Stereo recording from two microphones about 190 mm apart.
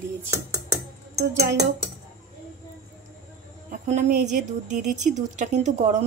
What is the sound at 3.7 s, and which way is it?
Speech, 40° right (ahead or behind).